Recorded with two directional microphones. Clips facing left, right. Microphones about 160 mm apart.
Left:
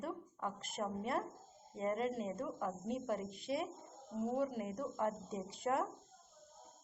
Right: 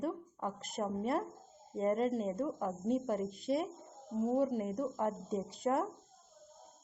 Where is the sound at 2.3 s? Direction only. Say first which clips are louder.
Right 5 dB; 20° right (ahead or behind).